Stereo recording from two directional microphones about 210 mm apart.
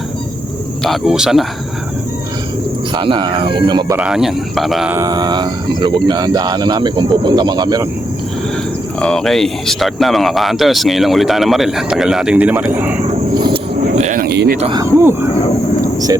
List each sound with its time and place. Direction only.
0.9 s speech: centre (ahead or behind)
2.9 s speech: 25° right (ahead or behind)
3.9 s speech: 5° right (ahead or behind)
4.9 s speech: 20° right (ahead or behind)
9.0 s speech: 5° left (ahead or behind)
13.7 s a sound: 35° right (ahead or behind)
14.6 s speech: 20° right (ahead or behind)
14.9 s speech: 10° right (ahead or behind)
15.8 s a sound: 15° right (ahead or behind)